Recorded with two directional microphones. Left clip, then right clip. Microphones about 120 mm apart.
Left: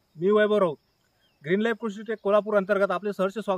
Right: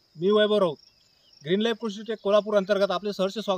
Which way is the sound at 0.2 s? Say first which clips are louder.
Even; 15° right (ahead or behind).